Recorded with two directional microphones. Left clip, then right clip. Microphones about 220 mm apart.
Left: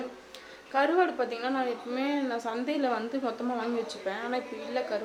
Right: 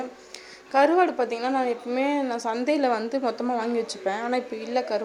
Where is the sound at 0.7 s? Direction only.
30° right (ahead or behind).